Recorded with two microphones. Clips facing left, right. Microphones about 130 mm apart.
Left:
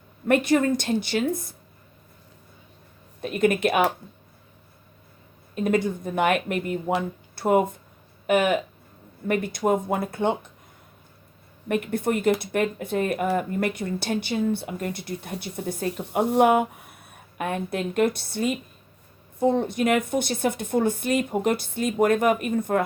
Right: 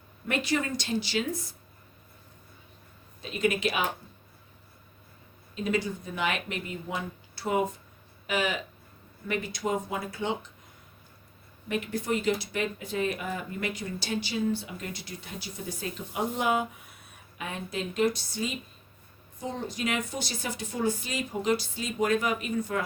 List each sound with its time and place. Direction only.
0.3 s speech: 55° left (ahead or behind)
3.2 s speech: 55° left (ahead or behind)
5.5 s speech: 55° left (ahead or behind)
11.7 s speech: 55° left (ahead or behind)